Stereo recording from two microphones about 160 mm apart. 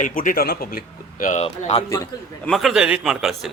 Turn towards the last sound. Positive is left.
turn(degrees=0)  # may be behind; listen again after turning